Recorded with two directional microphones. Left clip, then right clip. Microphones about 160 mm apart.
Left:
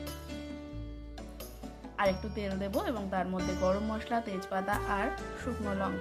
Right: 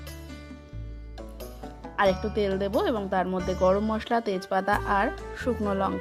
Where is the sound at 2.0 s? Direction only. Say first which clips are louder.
Right 7 dB; 45° right (ahead or behind).